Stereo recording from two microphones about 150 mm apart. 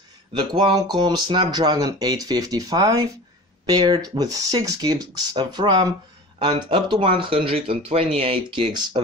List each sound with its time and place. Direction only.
0.3 s speech: 30° right (ahead or behind)